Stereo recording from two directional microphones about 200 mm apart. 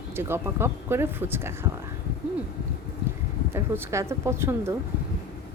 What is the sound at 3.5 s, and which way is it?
A woman's voice, 15° right (ahead or behind).